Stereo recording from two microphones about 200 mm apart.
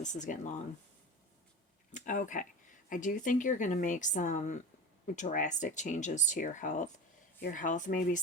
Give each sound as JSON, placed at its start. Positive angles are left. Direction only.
{"t": 0.0, "sound": "speech", "side_deg": 40}
{"t": 1.9, "sound": "speech", "side_deg": 40}